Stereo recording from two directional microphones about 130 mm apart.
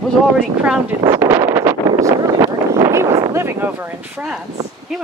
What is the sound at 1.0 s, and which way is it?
Wind noise, 20° right (ahead or behind).